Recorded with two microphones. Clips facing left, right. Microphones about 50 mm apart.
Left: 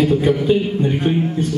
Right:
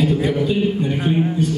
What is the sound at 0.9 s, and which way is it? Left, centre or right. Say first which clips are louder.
Speech: left 1 dB; centre.